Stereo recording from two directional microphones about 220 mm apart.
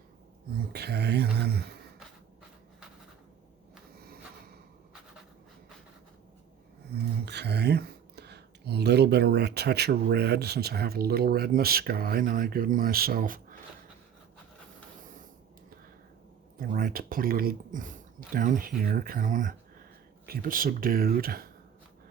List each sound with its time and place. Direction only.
0.5 s a sound: 45° right (ahead or behind)
7.3 s speech: 50° right (ahead or behind)
16.6 s speech: 40° right (ahead or behind)